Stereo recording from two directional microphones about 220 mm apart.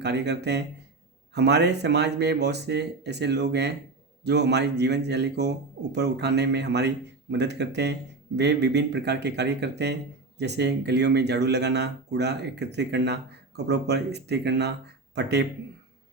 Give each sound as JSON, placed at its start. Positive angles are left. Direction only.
{"t": 0.0, "sound": "speech", "side_deg": -50}